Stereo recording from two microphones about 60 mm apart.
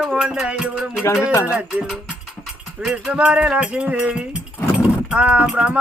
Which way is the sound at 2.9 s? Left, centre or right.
Centre.